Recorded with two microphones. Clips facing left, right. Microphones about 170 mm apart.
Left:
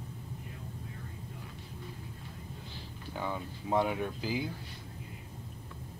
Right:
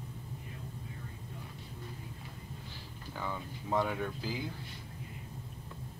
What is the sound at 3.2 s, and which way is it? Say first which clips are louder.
Speech: left 3 dB; 15° left (ahead or behind).